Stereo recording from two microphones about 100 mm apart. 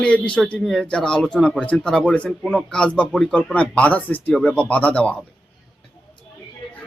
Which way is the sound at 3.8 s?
15° left (ahead or behind).